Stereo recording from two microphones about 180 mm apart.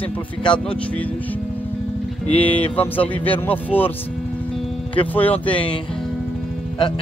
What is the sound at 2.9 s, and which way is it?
Speech, 10° left (ahead or behind).